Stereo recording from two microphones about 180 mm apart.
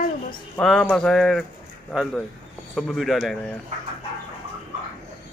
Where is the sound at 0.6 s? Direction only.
5° left (ahead or behind).